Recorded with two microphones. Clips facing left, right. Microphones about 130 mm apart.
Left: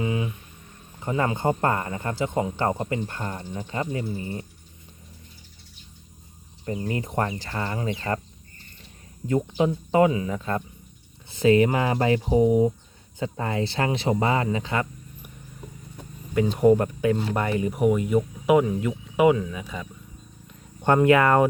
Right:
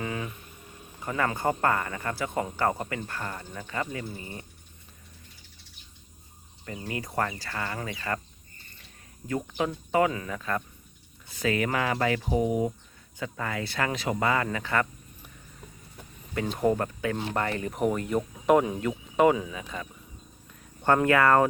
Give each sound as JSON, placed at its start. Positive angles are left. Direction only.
{"t": 0.0, "sound": "a sound", "side_deg": 15}
{"t": 0.9, "sound": "speech", "side_deg": 25}
{"t": 6.7, "sound": "speech", "side_deg": 25}
{"t": 9.6, "sound": "speech", "side_deg": 25}
{"t": 16.6, "sound": "speech", "side_deg": 20}
{"t": 20.5, "sound": "a sound", "side_deg": 20}